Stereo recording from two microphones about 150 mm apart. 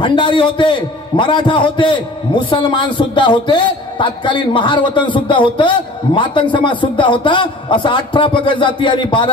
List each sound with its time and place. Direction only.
0.0 s a man's voice: 35° left (ahead or behind)